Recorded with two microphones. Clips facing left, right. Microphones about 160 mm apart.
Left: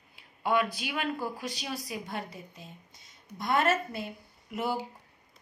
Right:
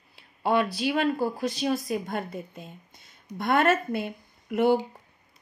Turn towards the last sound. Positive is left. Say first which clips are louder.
# right 10 dB
turn(degrees=-60)  # may be behind; listen again after turning